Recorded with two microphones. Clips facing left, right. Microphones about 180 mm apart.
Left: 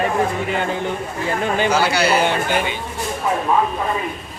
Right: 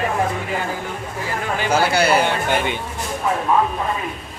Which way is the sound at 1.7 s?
55° right (ahead or behind).